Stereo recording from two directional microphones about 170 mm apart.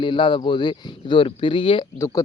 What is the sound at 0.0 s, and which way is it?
Speech, 30° left (ahead or behind).